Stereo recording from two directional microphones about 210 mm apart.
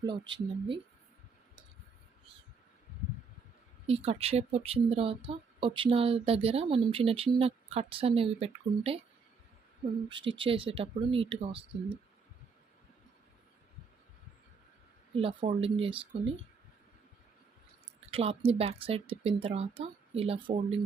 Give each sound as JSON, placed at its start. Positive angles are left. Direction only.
{"t": 0.0, "sound": "speech", "side_deg": -20}
{"t": 3.8, "sound": "speech", "side_deg": -30}
{"t": 10.1, "sound": "speech", "side_deg": -25}
{"t": 15.1, "sound": "speech", "side_deg": -25}
{"t": 18.1, "sound": "speech", "side_deg": -25}